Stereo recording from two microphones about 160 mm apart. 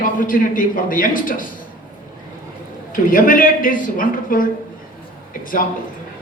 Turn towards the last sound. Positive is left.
turn(degrees=60)  # may be behind; listen again after turning